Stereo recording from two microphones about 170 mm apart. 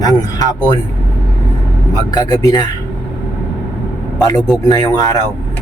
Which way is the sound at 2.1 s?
20° left (ahead or behind).